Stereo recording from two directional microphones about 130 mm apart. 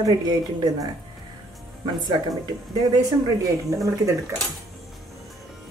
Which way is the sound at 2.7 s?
30° right (ahead or behind).